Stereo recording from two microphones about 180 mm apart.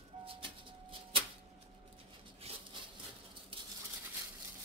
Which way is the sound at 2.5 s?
35° right (ahead or behind).